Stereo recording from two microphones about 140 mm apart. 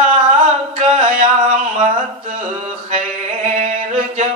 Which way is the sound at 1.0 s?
65° right (ahead or behind).